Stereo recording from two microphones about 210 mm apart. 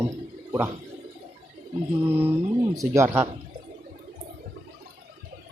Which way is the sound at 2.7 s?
15° right (ahead or behind).